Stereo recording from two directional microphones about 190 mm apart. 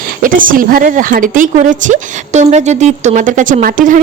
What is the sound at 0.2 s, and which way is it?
Speech, 45° right (ahead or behind).